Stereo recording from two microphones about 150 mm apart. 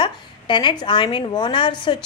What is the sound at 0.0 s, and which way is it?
A woman's voice, 30° left (ahead or behind).